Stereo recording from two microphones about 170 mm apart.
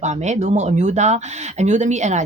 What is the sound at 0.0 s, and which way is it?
Speech, 45° right (ahead or behind).